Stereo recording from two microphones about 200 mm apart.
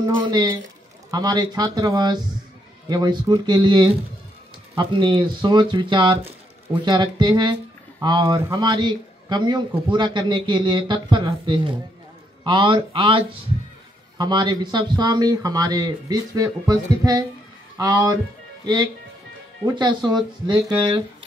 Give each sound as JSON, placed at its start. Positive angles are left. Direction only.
{"t": 0.0, "sound": "a man's voice", "side_deg": -20}
{"t": 19.6, "sound": "a man's voice", "side_deg": -20}